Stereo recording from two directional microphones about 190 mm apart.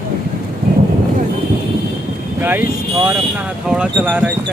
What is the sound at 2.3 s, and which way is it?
Vehicle, 10° right (ahead or behind).